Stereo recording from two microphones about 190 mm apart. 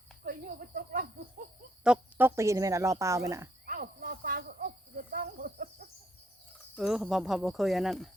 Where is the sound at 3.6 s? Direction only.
50° right (ahead or behind).